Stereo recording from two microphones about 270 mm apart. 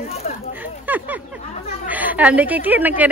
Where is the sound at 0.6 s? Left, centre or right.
Centre.